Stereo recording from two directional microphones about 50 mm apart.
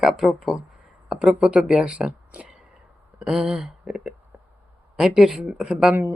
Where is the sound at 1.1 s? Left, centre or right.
Centre.